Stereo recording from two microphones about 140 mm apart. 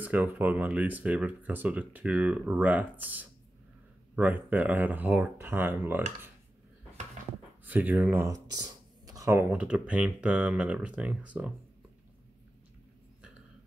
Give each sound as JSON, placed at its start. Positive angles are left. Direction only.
{"t": 0.0, "sound": "speech", "side_deg": -10}
{"t": 7.6, "sound": "speech", "side_deg": -10}
{"t": 9.5, "sound": "speech", "side_deg": -10}